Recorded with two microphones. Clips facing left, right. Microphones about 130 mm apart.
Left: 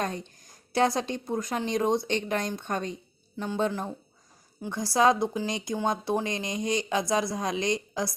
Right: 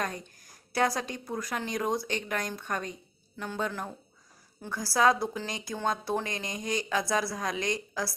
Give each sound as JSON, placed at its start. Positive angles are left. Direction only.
{"t": 0.0, "sound": "a woman's voice", "side_deg": 25}